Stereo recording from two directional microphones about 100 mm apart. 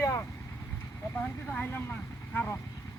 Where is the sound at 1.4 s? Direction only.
15° left (ahead or behind).